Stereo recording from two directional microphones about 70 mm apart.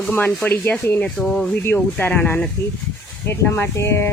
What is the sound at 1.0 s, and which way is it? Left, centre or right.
Speech, centre.